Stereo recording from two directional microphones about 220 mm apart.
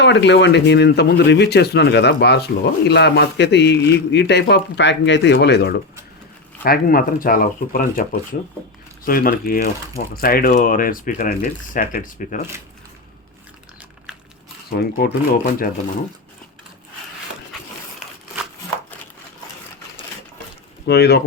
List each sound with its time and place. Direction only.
0.0 s speech: 50° left (ahead or behind); by 12.4 s 35° left (ahead or behind)
14.7 s speech: 40° left (ahead or behind)
20.8 s speech: 50° left (ahead or behind)